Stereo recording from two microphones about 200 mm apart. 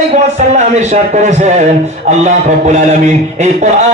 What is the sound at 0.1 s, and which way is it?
Speech, 35° right (ahead or behind).